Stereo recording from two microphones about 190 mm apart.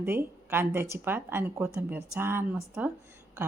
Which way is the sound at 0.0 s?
10° right (ahead or behind).